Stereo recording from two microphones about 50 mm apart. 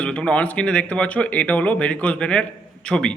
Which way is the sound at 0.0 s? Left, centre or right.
Left.